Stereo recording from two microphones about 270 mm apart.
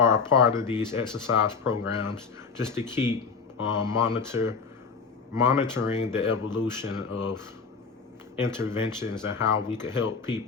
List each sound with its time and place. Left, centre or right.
0.0 s speech: centre
7.1 s speech: left
8.5 s speech: centre